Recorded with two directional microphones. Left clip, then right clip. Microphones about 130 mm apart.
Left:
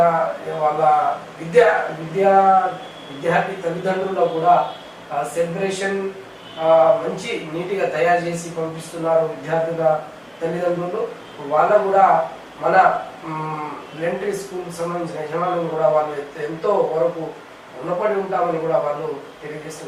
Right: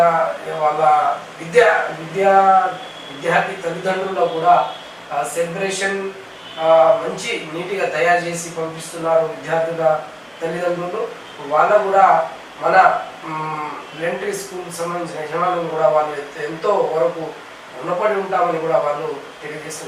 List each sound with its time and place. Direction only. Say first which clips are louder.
0.0 s a sound: right 2 dB; 25° left (ahead or behind)
1.5 s a man's voice: right 1 dB; 15° left (ahead or behind)
7.2 s a man's voice: right 2 dB; 10° left (ahead or behind)
9.0 s a man's voice: right 1 dB; 25° left (ahead or behind)
10.4 s a man's voice: even; 15° left (ahead or behind)
14.8 s a man's voice: right 1 dB; 35° left (ahead or behind)
15.0 s a man's voice: right 1 dB; 10° left (ahead or behind)
15.3 s a man's voice: right 3 dB; 20° left (ahead or behind)
17.8 s a man's voice: right 2 dB; 25° left (ahead or behind)